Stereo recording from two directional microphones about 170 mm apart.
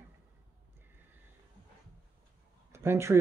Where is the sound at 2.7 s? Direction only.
15° right (ahead or behind).